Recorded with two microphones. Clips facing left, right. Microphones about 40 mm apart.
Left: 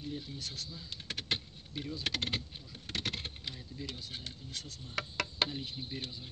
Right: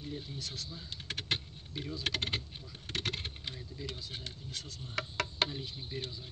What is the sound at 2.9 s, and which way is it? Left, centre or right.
Vehicle, right.